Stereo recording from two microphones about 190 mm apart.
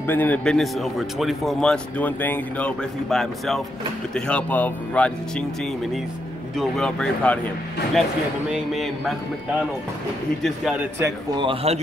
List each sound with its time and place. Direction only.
0.0 s speech: 10° left (ahead or behind)
11.0 s a man's voice: 20° right (ahead or behind)